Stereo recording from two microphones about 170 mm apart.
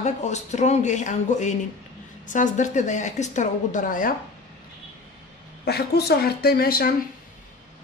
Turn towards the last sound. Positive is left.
turn(degrees=60)  # may be behind; listen again after turning